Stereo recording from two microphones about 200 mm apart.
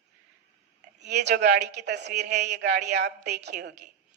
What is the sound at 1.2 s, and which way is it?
Speech, 55° right (ahead or behind).